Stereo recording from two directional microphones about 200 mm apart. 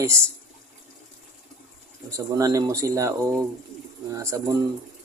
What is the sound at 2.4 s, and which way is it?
Speech, 15° right (ahead or behind).